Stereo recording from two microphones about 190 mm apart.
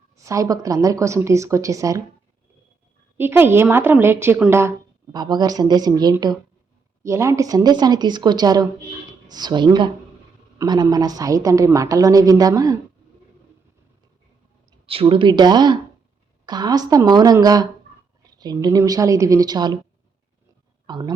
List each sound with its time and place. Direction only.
0.3 s a woman's voice: 20° right (ahead or behind)
3.2 s a woman's voice: 10° right (ahead or behind)
14.8 s a woman's voice: 30° right (ahead or behind)
20.8 s speech: 20° right (ahead or behind)